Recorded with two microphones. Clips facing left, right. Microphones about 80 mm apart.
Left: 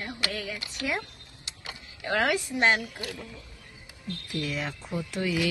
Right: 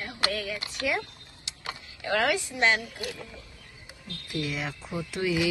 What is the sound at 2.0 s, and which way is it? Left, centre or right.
Speech, left.